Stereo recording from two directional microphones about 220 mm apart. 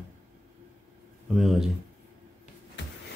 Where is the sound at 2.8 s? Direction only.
55° left (ahead or behind).